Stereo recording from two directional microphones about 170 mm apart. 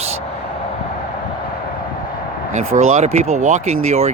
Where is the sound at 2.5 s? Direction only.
40° right (ahead or behind).